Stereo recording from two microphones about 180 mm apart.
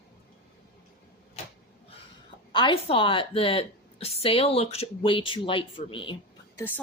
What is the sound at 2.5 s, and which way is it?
A woman's voice, 30° left (ahead or behind).